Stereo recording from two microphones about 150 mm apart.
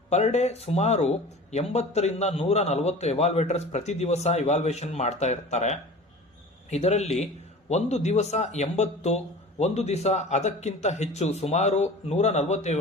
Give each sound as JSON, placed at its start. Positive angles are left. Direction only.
{"t": 0.1, "sound": "speech", "side_deg": 50}